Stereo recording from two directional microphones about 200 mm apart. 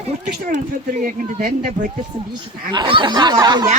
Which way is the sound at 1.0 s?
40° right (ahead or behind).